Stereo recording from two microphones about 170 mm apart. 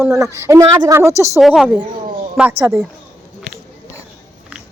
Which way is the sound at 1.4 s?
Centre (ahead or behind).